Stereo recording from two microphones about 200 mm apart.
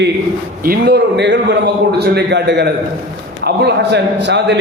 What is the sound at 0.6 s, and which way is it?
A man's voice, 50° right (ahead or behind).